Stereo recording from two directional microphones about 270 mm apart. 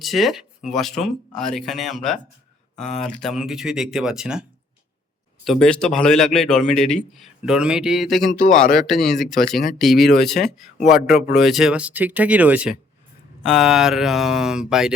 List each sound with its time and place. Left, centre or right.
0.0 s a man's voice: centre
5.5 s a man's voice: centre
8.3 s speech: left
8.7 s a man's voice: centre